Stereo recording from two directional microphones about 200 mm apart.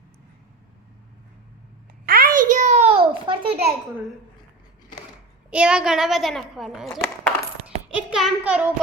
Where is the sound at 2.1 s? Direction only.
45° right (ahead or behind); by 3.6 s 25° right (ahead or behind).